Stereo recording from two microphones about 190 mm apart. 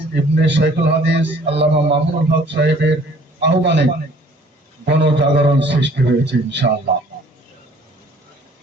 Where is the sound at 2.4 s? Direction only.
65° right (ahead or behind).